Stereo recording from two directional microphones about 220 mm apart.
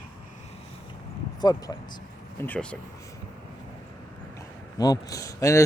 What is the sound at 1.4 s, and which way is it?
Speech, 15° left (ahead or behind).